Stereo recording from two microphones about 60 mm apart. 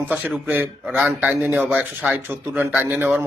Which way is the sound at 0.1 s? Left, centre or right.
Right.